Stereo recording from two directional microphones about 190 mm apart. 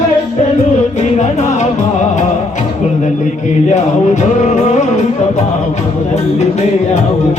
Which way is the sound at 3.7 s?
40° left (ahead or behind).